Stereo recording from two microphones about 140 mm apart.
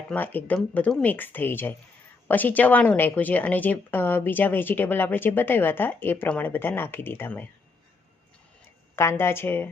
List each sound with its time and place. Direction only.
0.1 s a woman's voice: 15° left (ahead or behind)
9.0 s a woman's voice: 20° left (ahead or behind)